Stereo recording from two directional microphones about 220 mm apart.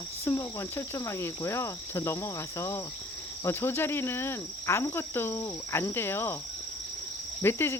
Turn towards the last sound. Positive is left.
turn(degrees=10)  # may be behind; listen again after turning